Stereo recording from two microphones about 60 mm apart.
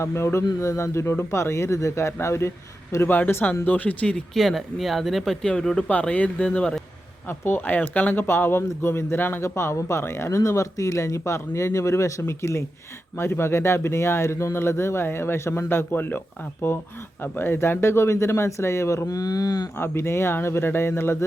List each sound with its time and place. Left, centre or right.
0.0 s speech: left
3.1 s speech: left
4.4 s speech: centre
5.5 s speech: left
7.3 s speech: left
9.4 s speech: left
19.0 s speech: left
19.7 s speech: left